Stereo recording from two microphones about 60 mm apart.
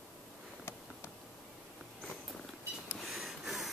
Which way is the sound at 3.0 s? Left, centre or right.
Centre.